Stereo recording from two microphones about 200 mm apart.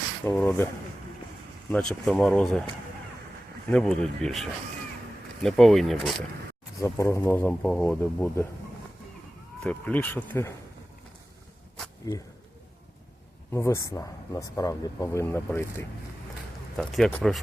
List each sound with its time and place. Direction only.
0.3 s speech: 10° left (ahead or behind)
1.7 s speech: 5° left (ahead or behind)
3.7 s speech: 5° left (ahead or behind)
6.7 s speech: 15° left (ahead or behind)
9.6 s speech: 10° left (ahead or behind)
12.1 s speech: 20° left (ahead or behind)
13.5 s speech: 15° left (ahead or behind)
16.7 s speech: centre (ahead or behind)